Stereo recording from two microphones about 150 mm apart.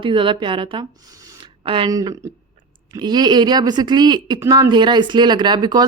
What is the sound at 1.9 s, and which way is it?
Speech, 25° right (ahead or behind).